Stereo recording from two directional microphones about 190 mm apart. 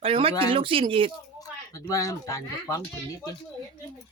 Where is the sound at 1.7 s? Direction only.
20° left (ahead or behind).